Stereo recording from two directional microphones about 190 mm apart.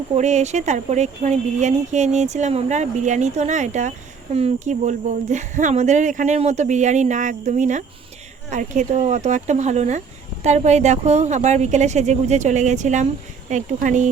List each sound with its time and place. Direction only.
0.1 s speech: 40° right (ahead or behind)